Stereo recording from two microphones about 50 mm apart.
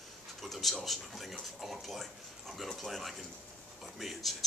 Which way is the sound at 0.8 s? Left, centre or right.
Centre.